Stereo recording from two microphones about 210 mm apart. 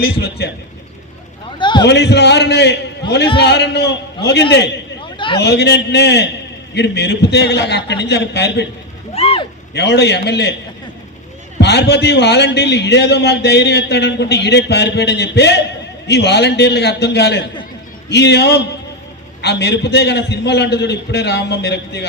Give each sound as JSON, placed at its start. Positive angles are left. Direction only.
{"t": 0.0, "sound": "a man's voice", "side_deg": 50}
{"t": 1.5, "sound": "a man's voice", "side_deg": 20}
{"t": 1.9, "sound": "a man's voice", "side_deg": 55}
{"t": 5.1, "sound": "a sound", "side_deg": 25}
{"t": 5.4, "sound": "a man's voice", "side_deg": 50}
{"t": 9.1, "sound": "a sound", "side_deg": 30}
{"t": 9.7, "sound": "a man's voice", "side_deg": 55}
{"t": 11.6, "sound": "a man's voice", "side_deg": 55}